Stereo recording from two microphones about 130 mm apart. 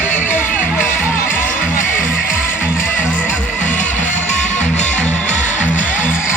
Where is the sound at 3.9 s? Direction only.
70° left (ahead or behind).